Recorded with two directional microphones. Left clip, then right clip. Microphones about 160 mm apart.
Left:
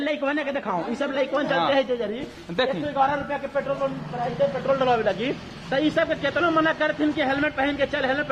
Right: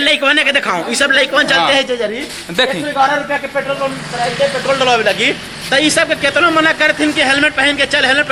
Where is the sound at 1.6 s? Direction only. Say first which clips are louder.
Right 9 dB; 20° right (ahead or behind).